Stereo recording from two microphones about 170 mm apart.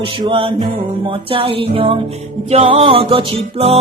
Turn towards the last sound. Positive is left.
turn(degrees=-35)  # may be behind; listen again after turning